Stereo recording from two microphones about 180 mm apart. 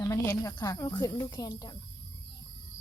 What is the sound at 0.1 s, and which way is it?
Speech, 15° left (ahead or behind).